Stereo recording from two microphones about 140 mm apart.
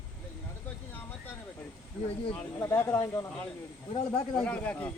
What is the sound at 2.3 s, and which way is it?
Speech, 15° left (ahead or behind).